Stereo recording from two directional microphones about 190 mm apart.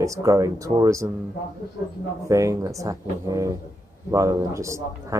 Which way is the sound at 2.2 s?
15° right (ahead or behind).